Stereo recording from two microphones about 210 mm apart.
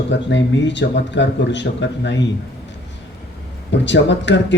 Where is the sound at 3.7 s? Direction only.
55° left (ahead or behind).